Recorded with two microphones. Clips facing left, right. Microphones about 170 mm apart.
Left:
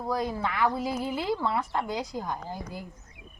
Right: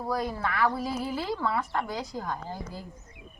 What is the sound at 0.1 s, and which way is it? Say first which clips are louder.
Speech: left 1 dB; 20° left (ahead or behind).